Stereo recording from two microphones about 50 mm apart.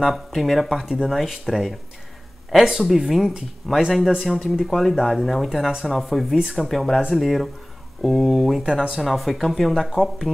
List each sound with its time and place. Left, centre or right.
0.0 s speech: centre
10.3 s speech: left